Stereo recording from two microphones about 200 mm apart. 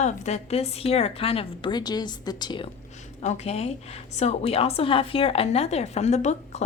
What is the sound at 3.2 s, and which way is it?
A woman's voice, 35° left (ahead or behind).